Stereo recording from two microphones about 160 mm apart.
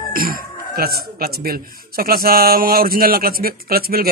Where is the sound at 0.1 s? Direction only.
65° right (ahead or behind).